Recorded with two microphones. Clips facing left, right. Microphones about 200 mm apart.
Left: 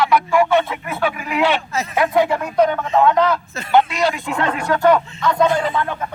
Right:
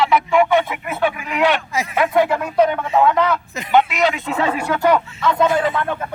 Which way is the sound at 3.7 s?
Centre (ahead or behind).